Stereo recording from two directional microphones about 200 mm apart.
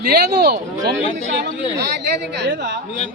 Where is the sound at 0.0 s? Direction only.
50° right (ahead or behind).